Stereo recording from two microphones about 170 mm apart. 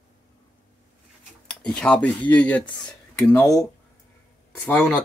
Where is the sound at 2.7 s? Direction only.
25° left (ahead or behind).